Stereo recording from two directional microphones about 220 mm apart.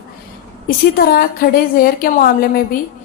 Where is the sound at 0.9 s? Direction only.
45° left (ahead or behind).